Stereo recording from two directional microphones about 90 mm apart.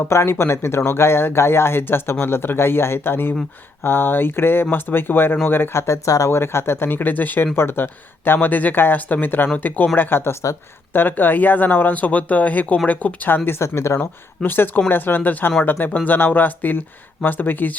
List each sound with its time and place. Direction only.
0.0 s speech: 30° left (ahead or behind)
14.0 s speech: 20° left (ahead or behind)